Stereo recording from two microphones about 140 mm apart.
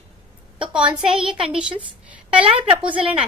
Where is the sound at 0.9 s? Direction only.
5° right (ahead or behind).